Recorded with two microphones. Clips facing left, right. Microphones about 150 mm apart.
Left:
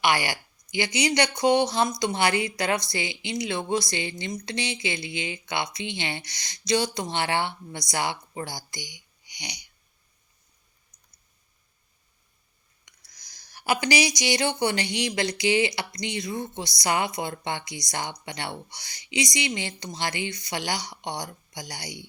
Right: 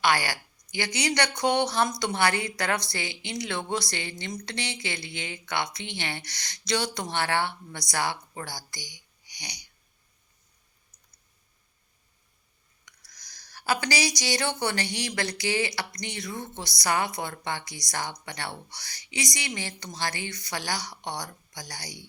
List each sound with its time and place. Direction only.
0.0 s a woman's voice: 15° left (ahead or behind)
13.1 s a woman's voice: 15° left (ahead or behind)